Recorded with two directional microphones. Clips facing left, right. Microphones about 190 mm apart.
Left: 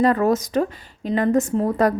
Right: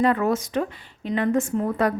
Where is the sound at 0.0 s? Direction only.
40° left (ahead or behind).